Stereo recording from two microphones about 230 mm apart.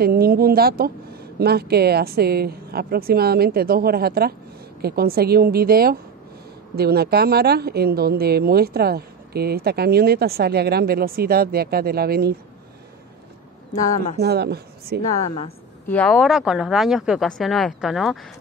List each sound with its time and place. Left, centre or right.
0.0 s a woman's voice: right
14.2 s speech: right
15.9 s speech: centre